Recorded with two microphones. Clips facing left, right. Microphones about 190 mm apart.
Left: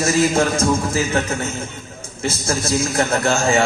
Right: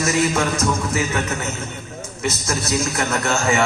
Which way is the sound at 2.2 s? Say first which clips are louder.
Left 2 dB; 30° left (ahead or behind).